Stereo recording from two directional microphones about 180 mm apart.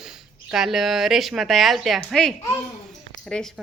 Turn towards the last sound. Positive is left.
turn(degrees=5)  # may be behind; listen again after turning